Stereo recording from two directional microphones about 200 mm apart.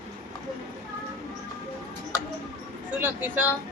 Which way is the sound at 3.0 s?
10° right (ahead or behind).